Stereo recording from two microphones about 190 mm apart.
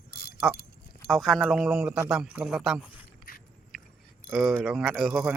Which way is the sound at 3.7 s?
Centre (ahead or behind).